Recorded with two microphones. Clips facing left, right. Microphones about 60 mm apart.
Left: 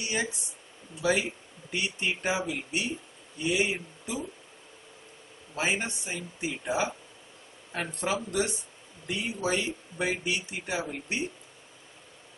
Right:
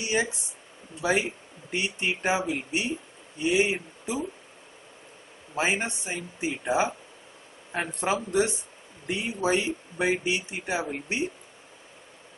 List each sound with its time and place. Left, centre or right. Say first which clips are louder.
0.0 s speech: right 4 dB; right
1.7 s speech: right 2 dB; right
5.5 s speech: right 3 dB; right